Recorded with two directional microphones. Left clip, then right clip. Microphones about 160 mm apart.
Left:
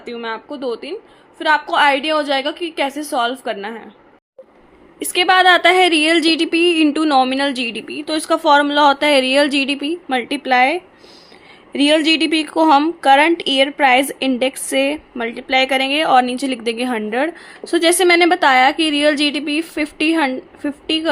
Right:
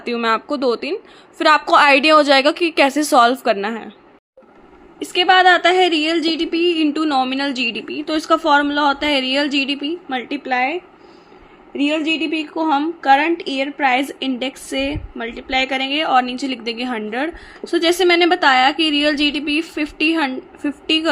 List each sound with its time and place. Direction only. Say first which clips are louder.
0.0 s a woman's voice: right 7 dB; 40° right (ahead or behind)
4.9 s a woman's voice: even; 20° left (ahead or behind)